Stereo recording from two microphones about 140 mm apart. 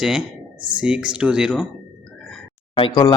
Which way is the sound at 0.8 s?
5° right (ahead or behind).